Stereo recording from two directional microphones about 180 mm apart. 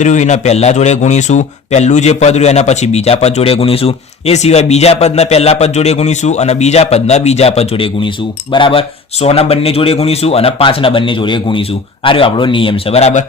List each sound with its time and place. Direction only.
0.0 s speech: 40° left (ahead or behind)